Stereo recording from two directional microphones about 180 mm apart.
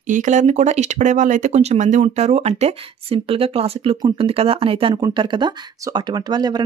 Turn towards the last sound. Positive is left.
turn(degrees=-25)  # may be behind; listen again after turning